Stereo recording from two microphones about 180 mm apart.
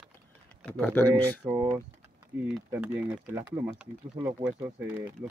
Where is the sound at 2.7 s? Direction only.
10° right (ahead or behind).